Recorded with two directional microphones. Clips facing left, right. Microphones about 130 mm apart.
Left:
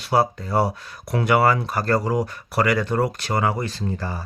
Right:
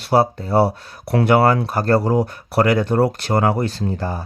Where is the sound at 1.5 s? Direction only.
45° right (ahead or behind).